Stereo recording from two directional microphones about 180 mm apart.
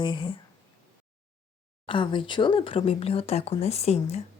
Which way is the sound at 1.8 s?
25° left (ahead or behind).